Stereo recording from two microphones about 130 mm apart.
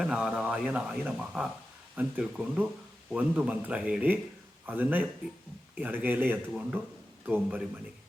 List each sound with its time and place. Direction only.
0.0 s speech: 5° right (ahead or behind)